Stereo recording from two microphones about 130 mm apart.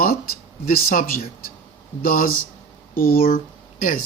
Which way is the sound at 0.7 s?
90° left.